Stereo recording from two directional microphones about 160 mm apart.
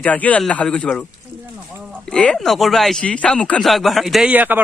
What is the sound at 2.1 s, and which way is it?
Speech, 5° left (ahead or behind).